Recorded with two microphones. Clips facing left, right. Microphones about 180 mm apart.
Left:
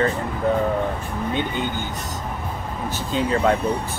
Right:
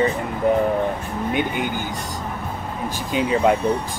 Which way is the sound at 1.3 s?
10° right (ahead or behind).